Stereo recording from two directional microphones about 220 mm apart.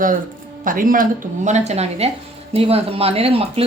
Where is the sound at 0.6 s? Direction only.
40° right (ahead or behind).